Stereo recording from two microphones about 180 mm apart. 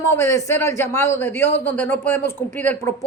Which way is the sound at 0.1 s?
15° left (ahead or behind).